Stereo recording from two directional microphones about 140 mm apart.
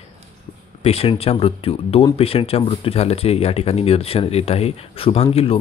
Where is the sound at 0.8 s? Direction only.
45° left (ahead or behind).